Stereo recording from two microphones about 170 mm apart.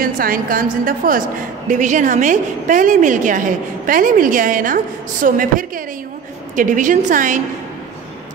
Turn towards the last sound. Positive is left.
turn(degrees=-50)  # may be behind; listen again after turning